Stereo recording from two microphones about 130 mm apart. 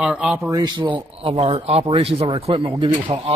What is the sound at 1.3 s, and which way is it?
Speech, 55° right (ahead or behind).